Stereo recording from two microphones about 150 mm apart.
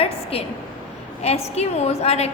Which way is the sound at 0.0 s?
40° left (ahead or behind).